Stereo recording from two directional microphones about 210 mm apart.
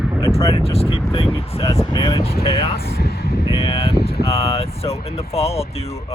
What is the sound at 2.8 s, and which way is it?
Vehicle, 50° left (ahead or behind).